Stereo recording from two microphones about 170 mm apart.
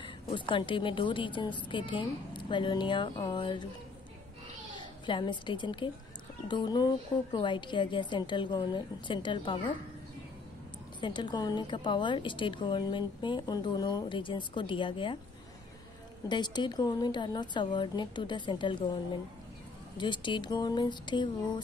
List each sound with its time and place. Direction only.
0.0 s a woman's voice: 30° left (ahead or behind)
5.0 s a woman's voice: 25° left (ahead or behind)
11.0 s a woman's voice: 25° left (ahead or behind)
16.3 s a woman's voice: 25° left (ahead or behind)
20.0 s a woman's voice: 30° left (ahead or behind)